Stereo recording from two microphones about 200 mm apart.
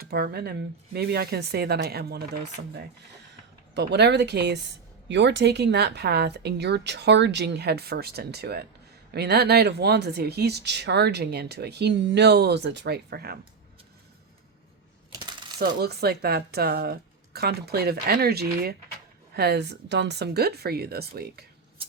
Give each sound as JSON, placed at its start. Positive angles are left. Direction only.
{"t": 0.0, "sound": "speech", "side_deg": -50}
{"t": 15.1, "sound": "coin", "side_deg": -20}
{"t": 15.8, "sound": "speech", "side_deg": -50}